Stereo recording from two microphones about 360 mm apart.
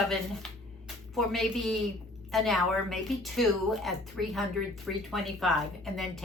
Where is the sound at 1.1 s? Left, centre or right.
Centre.